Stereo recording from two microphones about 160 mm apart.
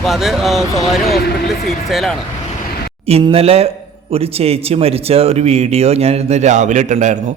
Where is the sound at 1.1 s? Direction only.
80° left.